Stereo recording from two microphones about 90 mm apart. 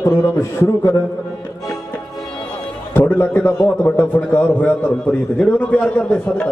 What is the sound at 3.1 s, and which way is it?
A man's voice, 20° left (ahead or behind).